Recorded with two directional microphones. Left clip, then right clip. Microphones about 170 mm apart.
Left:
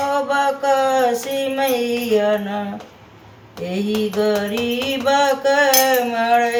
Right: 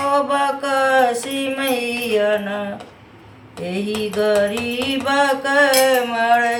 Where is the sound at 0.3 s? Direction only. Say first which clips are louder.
Left 2 dB; 20° right (ahead or behind).